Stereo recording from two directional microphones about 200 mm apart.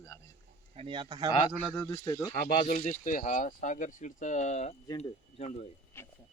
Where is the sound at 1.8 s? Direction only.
15° left (ahead or behind).